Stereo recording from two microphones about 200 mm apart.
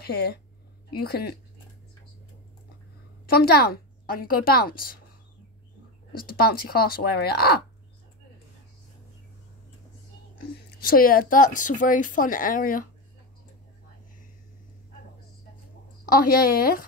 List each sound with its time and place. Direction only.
0.0 s speech: 50° left (ahead or behind)
3.3 s speech: 50° left (ahead or behind)
6.1 s speech: 50° left (ahead or behind)
10.8 s speech: 45° left (ahead or behind)
16.1 s speech: 50° left (ahead or behind)